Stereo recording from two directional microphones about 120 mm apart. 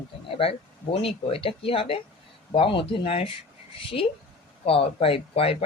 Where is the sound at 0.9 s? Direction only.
50° left (ahead or behind).